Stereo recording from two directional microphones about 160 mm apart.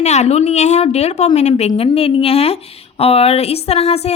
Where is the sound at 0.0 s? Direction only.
45° left (ahead or behind).